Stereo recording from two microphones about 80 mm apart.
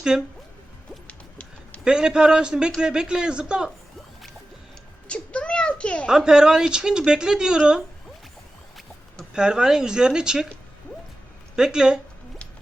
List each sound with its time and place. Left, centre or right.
1.0 s a sound: centre
1.8 s speech: centre
5.0 s a sound: centre
6.1 s speech: centre
9.3 s speech: centre
11.5 s speech: centre